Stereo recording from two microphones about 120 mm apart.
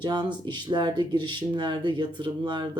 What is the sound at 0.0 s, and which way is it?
Speech, 35° right (ahead or behind).